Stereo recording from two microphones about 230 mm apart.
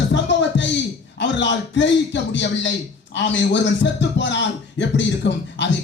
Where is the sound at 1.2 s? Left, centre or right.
Left.